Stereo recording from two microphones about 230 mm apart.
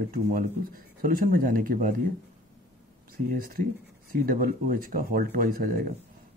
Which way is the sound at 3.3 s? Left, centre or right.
Right.